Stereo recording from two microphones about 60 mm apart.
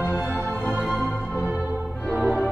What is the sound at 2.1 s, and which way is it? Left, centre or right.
Music, centre.